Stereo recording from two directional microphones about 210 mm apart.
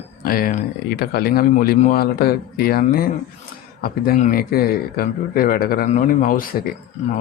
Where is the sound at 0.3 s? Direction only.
45° left (ahead or behind).